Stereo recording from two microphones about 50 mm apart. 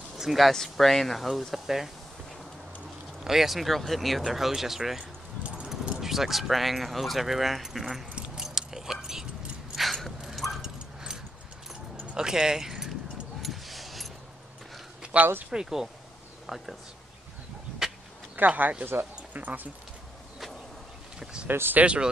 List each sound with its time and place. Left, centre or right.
0.2 s speech: centre
0.5 s speech: centre
3.3 s speech: centre
8.4 s keys jangling: centre
9.8 s a sound: centre
10.2 s dog: centre
10.6 s dog: centre
12.1 s keys jangling: centre
13.4 s a sound: centre
15.1 s speech: right
15.5 s speech: centre
18.3 s speech: right
21.5 s speech: right
21.8 s speech: right